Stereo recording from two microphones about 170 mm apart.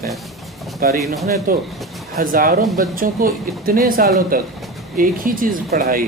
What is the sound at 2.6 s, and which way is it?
Speech, centre (ahead or behind).